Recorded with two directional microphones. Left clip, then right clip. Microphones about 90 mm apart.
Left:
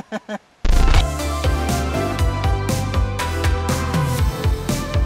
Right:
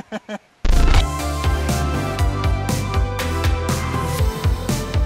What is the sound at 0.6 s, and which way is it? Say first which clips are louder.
Music: even; centre (ahead or behind).